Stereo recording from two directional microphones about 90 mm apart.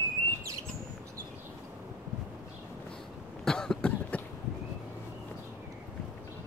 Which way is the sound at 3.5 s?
5° left (ahead or behind).